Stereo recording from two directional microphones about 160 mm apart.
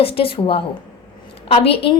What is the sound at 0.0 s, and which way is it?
A woman's voice, 35° left (ahead or behind).